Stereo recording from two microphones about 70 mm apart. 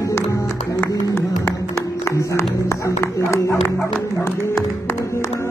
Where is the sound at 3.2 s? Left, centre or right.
Left.